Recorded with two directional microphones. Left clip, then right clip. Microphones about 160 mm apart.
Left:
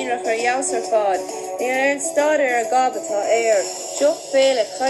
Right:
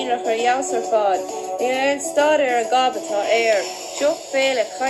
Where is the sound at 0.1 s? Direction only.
20° left (ahead or behind).